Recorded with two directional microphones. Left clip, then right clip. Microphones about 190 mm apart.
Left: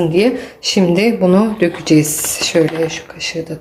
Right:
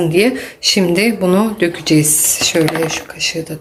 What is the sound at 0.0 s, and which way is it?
Speech, 5° right (ahead or behind).